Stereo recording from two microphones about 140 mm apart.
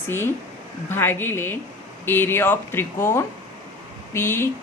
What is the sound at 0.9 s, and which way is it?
A woman's voice, 15° left (ahead or behind).